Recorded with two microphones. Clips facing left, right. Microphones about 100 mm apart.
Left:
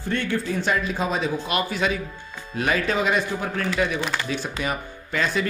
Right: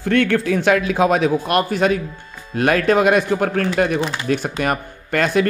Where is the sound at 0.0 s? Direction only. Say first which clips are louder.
Right 9 dB; 75° right (ahead or behind).